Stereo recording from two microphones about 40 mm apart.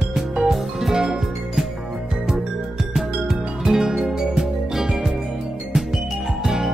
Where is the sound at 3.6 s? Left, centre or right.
Centre.